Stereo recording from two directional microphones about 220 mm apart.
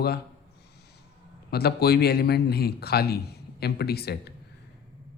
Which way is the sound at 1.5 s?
45° left (ahead or behind).